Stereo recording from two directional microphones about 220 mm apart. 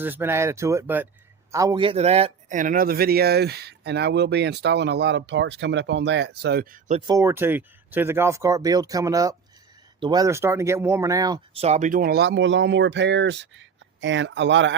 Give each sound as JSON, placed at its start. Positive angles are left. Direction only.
{"t": 0.0, "sound": "speech", "side_deg": -10}
{"t": 7.1, "sound": "speech", "side_deg": -15}